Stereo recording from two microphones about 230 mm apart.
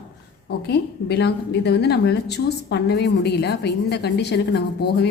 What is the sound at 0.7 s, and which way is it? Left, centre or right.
A woman's voice, left.